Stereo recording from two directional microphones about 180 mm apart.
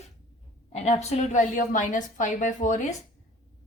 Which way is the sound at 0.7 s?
40° left (ahead or behind).